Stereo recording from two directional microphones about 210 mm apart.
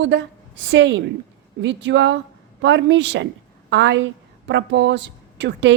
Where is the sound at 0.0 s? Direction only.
60° right (ahead or behind).